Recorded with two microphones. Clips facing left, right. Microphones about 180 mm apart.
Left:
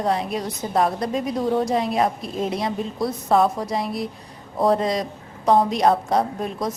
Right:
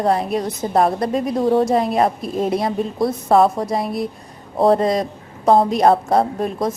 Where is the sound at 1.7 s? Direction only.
50° right (ahead or behind).